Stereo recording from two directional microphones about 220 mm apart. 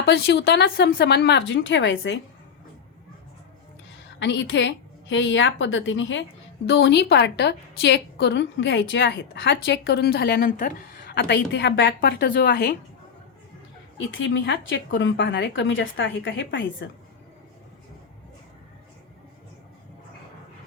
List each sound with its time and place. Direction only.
0.0 s a woman's voice: 45° left (ahead or behind)
4.2 s a woman's voice: 55° left (ahead or behind)
14.1 s a woman's voice: 60° left (ahead or behind)